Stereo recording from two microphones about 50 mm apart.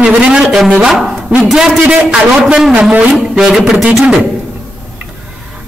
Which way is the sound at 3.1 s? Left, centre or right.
Centre.